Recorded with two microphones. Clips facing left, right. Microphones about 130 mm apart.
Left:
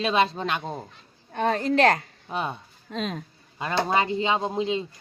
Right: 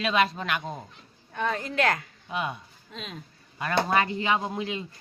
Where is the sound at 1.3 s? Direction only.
45° left (ahead or behind).